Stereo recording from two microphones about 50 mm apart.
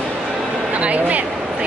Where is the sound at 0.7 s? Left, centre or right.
Right.